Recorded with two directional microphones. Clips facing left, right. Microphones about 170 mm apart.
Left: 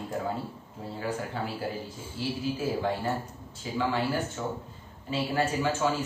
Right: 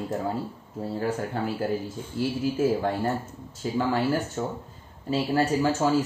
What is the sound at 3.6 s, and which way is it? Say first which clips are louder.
Speech: right 4 dB; 45° right (ahead or behind).